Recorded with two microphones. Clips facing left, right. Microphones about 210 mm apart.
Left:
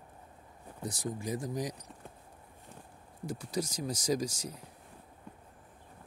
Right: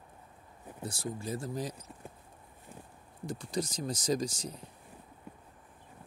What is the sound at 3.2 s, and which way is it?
Speech, 10° left (ahead or behind).